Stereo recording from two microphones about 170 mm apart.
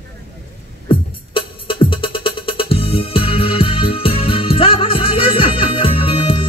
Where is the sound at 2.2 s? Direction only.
35° left (ahead or behind).